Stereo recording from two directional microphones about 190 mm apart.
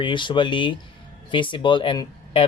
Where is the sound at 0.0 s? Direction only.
25° left (ahead or behind).